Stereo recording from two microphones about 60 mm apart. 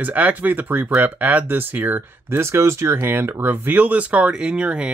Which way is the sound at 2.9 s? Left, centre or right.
Right.